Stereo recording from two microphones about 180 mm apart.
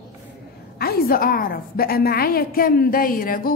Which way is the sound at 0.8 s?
55° left (ahead or behind).